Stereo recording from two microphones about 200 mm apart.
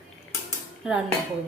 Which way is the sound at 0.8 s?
5° right (ahead or behind).